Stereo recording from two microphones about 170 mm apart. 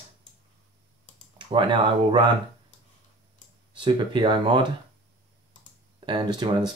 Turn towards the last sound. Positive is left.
turn(degrees=-25)  # may be behind; listen again after turning